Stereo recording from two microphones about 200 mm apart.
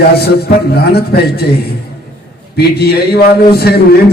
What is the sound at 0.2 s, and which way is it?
A man's voice, 50° left (ahead or behind).